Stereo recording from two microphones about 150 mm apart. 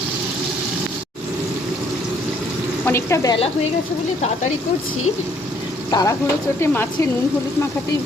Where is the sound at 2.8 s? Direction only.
20° left (ahead or behind).